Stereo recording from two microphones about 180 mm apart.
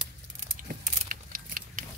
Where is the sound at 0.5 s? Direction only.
50° right (ahead or behind).